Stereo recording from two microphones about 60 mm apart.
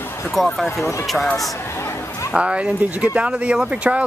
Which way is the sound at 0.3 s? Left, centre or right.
Centre.